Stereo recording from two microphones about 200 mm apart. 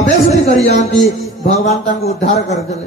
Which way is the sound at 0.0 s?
35° left (ahead or behind).